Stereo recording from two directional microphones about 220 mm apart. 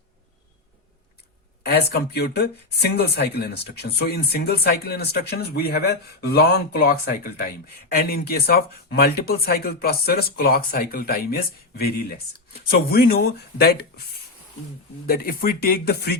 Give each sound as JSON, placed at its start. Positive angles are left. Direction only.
{"t": 1.6, "sound": "speech", "side_deg": 45}
{"t": 15.0, "sound": "speech", "side_deg": 45}